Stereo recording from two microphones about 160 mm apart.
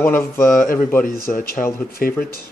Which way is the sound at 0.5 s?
60° left (ahead or behind).